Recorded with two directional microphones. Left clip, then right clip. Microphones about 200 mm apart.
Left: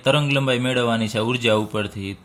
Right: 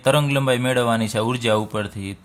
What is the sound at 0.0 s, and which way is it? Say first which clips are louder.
Speech: right 1 dB; 30° right (ahead or behind).